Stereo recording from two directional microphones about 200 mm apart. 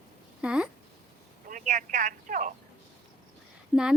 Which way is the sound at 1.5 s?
40° right (ahead or behind).